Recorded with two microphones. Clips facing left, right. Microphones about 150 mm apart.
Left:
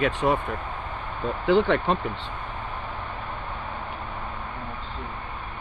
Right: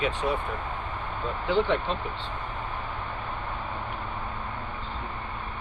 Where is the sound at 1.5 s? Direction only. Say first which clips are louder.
Left 5 dB; 65° left (ahead or behind).